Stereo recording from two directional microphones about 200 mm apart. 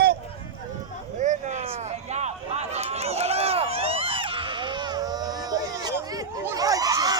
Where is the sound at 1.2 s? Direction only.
35° right (ahead or behind).